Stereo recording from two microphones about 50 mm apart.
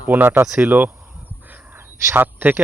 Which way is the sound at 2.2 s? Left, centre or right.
Right.